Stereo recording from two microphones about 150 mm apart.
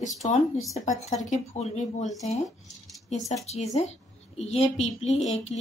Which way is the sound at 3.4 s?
45° left (ahead or behind).